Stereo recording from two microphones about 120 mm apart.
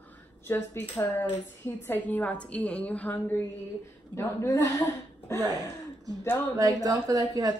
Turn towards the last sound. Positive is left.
turn(degrees=-30)  # may be behind; listen again after turning